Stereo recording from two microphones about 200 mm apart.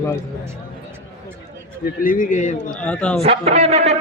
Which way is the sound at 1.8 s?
45° left (ahead or behind).